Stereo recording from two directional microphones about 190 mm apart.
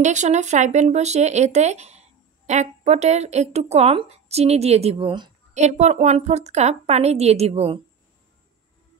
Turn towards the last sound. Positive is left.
turn(degrees=-30)  # may be behind; listen again after turning